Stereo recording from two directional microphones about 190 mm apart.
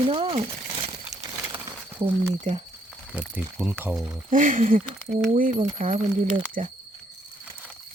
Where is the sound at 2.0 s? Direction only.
25° right (ahead or behind).